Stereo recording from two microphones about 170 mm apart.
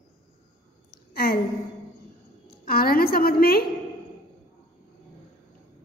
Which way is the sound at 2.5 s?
60° left (ahead or behind).